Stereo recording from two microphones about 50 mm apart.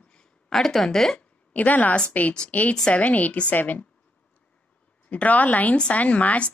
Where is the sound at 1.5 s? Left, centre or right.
Left.